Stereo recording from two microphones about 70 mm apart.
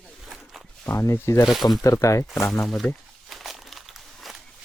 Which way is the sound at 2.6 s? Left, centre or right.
Centre.